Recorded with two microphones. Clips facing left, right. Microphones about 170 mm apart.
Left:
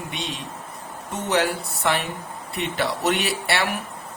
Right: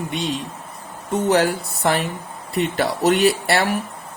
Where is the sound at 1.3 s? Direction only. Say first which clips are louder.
Right 3 dB; 40° right (ahead or behind).